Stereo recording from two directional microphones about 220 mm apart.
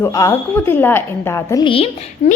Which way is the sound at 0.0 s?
10° left (ahead or behind).